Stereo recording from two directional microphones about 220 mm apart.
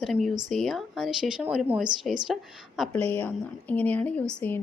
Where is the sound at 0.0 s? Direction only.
Centre (ahead or behind).